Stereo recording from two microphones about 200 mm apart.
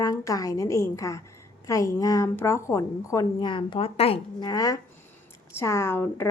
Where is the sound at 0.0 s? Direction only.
20° left (ahead or behind).